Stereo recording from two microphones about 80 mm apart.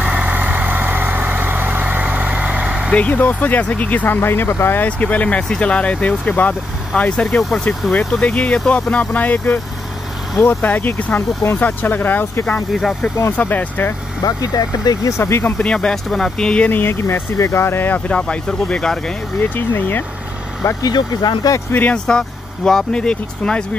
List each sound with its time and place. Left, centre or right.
0.0 s vehicle: centre
2.9 s speech: centre
4.8 s speech: centre
12.7 s speech: centre
13.4 s speech: left
14.2 s speech: left
15.0 s speech: left
15.4 s speech: centre
18.1 s speech: centre
19.4 s speech: left
20.8 s speech: left
21.9 s speech: centre